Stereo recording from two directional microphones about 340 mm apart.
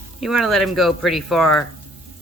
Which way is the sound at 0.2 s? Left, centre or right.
Centre.